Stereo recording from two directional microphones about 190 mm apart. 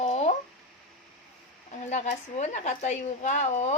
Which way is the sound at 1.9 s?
40° left (ahead or behind).